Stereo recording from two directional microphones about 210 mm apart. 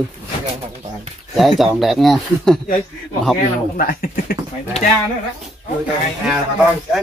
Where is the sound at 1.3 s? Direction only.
Centre (ahead or behind).